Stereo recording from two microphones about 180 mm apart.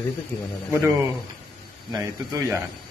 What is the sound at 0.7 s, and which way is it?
Speech, 15° right (ahead or behind).